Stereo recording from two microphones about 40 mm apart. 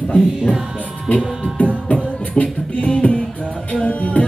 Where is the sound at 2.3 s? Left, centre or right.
Left.